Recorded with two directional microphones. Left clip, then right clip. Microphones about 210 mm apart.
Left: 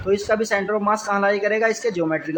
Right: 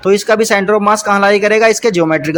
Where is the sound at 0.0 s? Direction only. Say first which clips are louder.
Right 9 dB; 45° right (ahead or behind).